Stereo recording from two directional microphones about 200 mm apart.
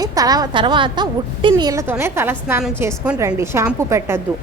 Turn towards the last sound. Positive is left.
turn(degrees=-15)  # may be behind; listen again after turning